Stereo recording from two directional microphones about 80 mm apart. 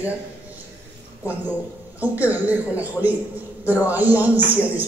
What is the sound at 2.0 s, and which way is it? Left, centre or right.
Speech, centre.